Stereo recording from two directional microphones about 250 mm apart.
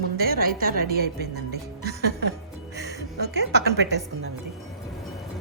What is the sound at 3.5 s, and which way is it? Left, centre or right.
Speech, right.